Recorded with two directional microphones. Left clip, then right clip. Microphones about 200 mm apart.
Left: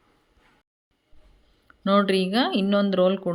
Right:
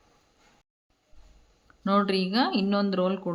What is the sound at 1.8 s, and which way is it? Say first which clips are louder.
Speech: left 4 dB; 15° left (ahead or behind).